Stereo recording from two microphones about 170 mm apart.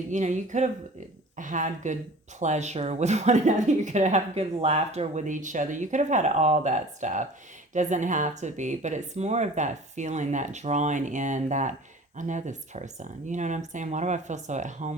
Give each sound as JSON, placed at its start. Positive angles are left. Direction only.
{"t": 0.1, "sound": "speech", "side_deg": -45}